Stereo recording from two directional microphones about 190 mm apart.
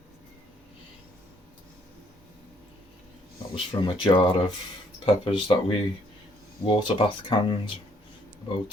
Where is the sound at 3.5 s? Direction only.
25° left (ahead or behind).